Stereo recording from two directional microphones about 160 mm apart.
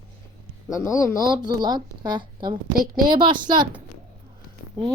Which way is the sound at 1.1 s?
30° right (ahead or behind).